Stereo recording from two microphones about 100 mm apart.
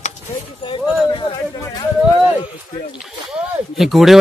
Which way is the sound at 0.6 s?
60° left (ahead or behind).